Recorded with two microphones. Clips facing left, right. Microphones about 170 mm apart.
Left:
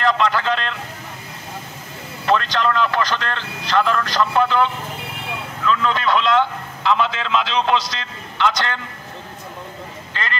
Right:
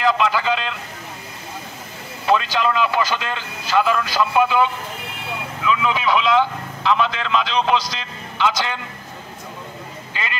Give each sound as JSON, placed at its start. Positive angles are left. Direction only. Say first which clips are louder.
{"t": 0.0, "sound": "a sound", "louder": "even", "side_deg": -5}
{"t": 2.2, "sound": "a man's voice", "louder": "even", "side_deg": -5}
{"t": 10.1, "sound": "speech", "louder": "left 1 dB", "side_deg": -10}